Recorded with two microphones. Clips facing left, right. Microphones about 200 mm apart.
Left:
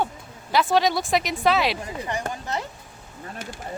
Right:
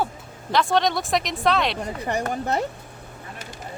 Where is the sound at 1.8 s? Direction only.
60° right (ahead or behind).